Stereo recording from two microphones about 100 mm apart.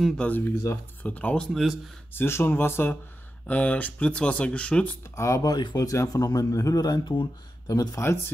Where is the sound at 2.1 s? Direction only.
25° left (ahead or behind).